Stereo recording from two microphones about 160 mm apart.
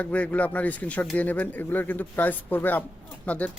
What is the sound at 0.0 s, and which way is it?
Speech, 10° left (ahead or behind).